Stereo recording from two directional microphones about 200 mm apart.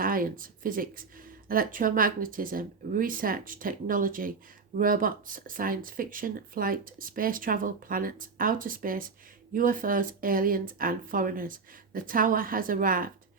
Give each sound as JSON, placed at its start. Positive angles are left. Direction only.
{"t": 0.0, "sound": "speech", "side_deg": -45}